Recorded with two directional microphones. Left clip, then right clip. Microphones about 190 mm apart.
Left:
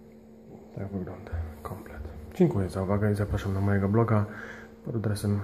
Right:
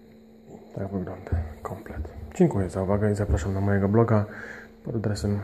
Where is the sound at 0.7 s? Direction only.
20° right (ahead or behind).